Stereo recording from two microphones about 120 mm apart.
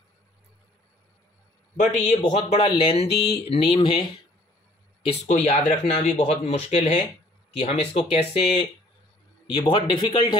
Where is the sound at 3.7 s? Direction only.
45° left (ahead or behind).